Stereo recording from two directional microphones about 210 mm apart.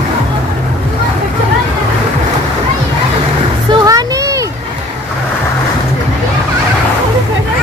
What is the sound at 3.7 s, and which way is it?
Music, 15° right (ahead or behind).